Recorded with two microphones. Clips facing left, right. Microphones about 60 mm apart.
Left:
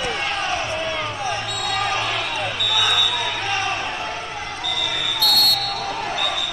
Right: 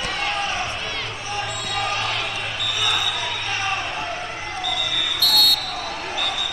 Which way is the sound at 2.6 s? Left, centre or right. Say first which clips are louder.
Left 2 dB; left.